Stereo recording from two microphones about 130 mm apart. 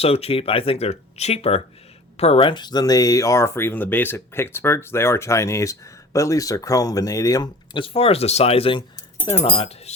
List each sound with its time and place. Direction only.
0.0 s speech: 50° left (ahead or behind)